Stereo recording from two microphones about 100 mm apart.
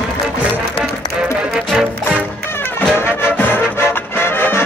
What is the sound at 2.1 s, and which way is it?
Music, 20° left (ahead or behind).